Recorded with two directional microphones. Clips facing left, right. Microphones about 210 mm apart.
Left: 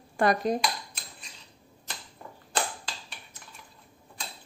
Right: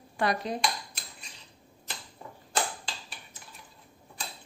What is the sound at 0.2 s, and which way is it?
Speech, 45° left (ahead or behind).